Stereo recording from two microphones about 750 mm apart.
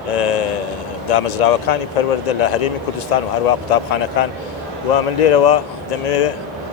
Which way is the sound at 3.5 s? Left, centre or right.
Left.